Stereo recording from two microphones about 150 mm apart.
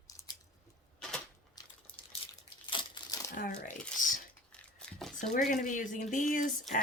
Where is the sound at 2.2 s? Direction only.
35° left (ahead or behind).